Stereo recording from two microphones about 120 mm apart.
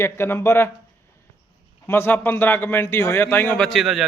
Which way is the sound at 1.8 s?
20° left (ahead or behind).